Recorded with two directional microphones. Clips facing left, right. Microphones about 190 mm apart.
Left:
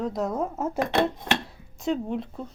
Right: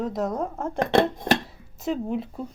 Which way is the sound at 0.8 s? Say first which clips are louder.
Right 4 dB; 40° right (ahead or behind).